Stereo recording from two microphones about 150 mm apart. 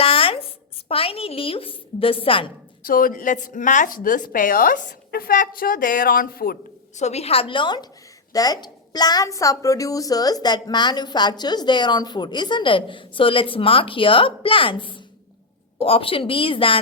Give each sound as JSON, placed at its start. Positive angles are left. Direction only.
{"t": 0.0, "sound": "a woman's voice", "side_deg": 40}
{"t": 2.8, "sound": "a woman's voice", "side_deg": 70}
{"t": 6.9, "sound": "a woman's voice", "side_deg": 45}